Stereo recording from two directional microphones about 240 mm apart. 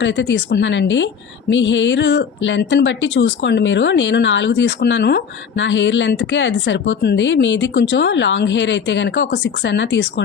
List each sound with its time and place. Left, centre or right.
0.0 s a woman's voice: left